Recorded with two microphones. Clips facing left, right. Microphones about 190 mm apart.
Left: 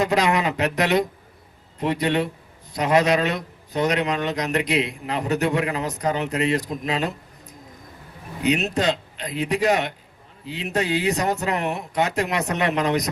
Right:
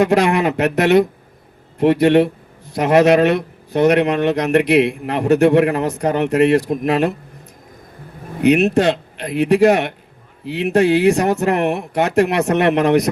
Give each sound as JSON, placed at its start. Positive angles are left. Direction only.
{"t": 0.0, "sound": "speech", "side_deg": -60}
{"t": 8.4, "sound": "speech", "side_deg": -60}